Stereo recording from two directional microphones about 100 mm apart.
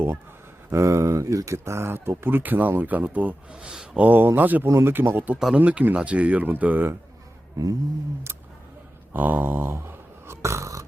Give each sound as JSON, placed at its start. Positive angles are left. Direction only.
{"t": 0.7, "sound": "speech", "side_deg": -30}
{"t": 7.5, "sound": "a sound", "side_deg": -40}
{"t": 9.1, "sound": "snoring", "side_deg": -20}